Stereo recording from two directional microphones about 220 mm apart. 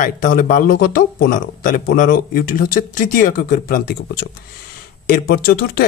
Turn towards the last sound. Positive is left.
turn(degrees=45)  # may be behind; listen again after turning